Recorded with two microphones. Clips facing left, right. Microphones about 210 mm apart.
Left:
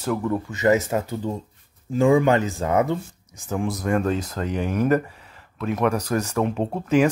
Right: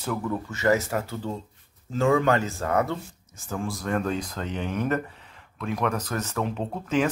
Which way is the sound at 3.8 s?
5° left (ahead or behind).